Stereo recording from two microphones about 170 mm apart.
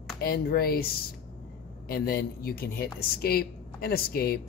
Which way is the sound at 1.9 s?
65° left (ahead or behind).